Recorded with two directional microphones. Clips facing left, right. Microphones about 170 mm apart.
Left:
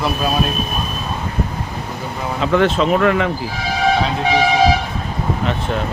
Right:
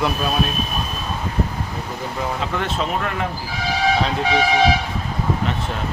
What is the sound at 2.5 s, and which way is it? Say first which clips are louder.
Speech: left 13 dB; 90° left.